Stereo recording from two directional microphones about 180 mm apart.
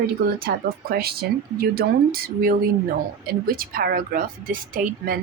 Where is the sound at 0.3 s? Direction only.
55° right (ahead or behind).